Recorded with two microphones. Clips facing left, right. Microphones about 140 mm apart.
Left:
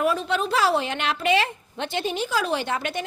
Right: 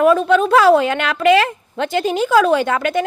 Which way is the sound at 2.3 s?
70° right (ahead or behind).